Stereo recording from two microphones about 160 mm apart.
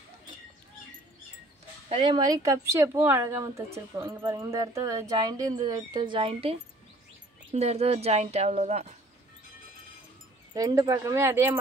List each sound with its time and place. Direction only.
1.9 s a woman's voice: 30° right (ahead or behind)
10.5 s speech: 20° right (ahead or behind)